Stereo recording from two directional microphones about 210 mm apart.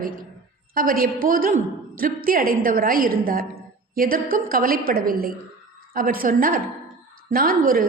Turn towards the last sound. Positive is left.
turn(degrees=-40)  # may be behind; listen again after turning